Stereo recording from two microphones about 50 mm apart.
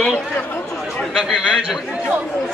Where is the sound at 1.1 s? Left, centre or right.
Centre.